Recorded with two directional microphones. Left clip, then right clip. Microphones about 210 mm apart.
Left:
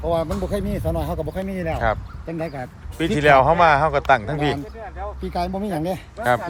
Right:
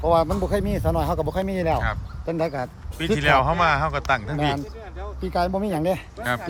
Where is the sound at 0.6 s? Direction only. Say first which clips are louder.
Right 1 dB; centre (ahead or behind).